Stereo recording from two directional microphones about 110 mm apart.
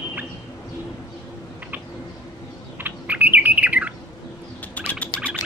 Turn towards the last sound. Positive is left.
turn(degrees=10)  # may be behind; listen again after turning